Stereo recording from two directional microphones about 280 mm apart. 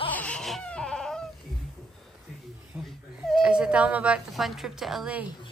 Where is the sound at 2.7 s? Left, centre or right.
Centre.